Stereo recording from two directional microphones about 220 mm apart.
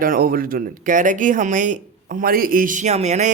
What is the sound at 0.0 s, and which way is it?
Speech, 40° right (ahead or behind).